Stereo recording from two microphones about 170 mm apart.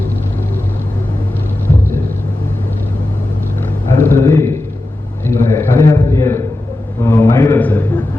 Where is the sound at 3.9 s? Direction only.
15° left (ahead or behind).